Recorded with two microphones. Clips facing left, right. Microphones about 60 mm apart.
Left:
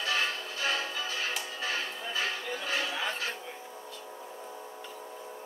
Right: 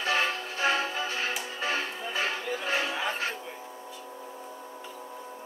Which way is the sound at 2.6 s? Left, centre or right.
Right.